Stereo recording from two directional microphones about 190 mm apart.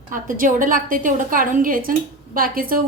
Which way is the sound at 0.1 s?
45° right (ahead or behind).